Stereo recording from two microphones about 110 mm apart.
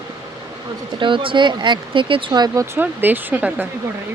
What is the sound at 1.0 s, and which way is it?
Speech, 50° right (ahead or behind).